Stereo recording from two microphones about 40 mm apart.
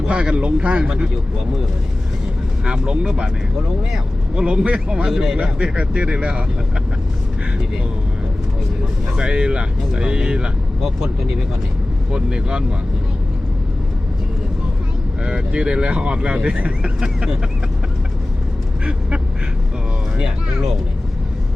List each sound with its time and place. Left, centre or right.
0.0 s speech: right
2.6 s speech: right
5.1 s speech: centre
5.4 s speech: right
9.1 s speech: right
12.1 s speech: right
15.2 s speech: right